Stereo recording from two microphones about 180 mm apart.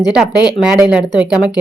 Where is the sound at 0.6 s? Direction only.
5° right (ahead or behind).